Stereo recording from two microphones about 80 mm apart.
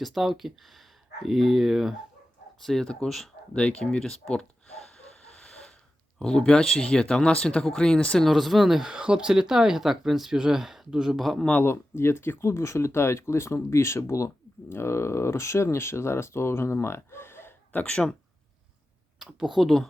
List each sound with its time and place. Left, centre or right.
0.0 s speech: centre
5.4 s a sound: centre
6.1 s speech: centre
8.3 s speech: centre
11.6 s speech: left
17.7 s speech: centre
19.2 s speech: centre